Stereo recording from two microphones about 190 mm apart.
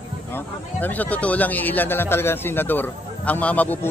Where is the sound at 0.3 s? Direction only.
10° left (ahead or behind).